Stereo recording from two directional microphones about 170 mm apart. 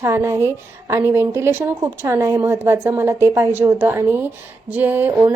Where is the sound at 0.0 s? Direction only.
15° right (ahead or behind).